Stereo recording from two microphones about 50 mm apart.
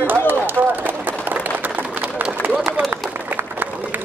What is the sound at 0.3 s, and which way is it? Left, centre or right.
Run, right.